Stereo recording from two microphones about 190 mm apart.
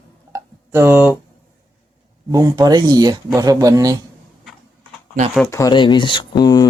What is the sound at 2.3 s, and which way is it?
Speech, 20° right (ahead or behind).